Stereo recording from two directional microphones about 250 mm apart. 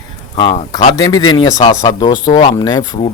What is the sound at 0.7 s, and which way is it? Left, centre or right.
Speech, centre.